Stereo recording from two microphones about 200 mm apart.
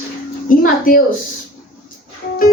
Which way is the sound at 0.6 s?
45° left (ahead or behind).